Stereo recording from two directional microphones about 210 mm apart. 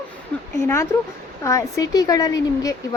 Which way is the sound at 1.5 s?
15° left (ahead or behind).